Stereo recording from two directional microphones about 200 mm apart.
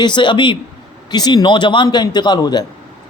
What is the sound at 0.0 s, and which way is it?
A man's voice, 25° left (ahead or behind).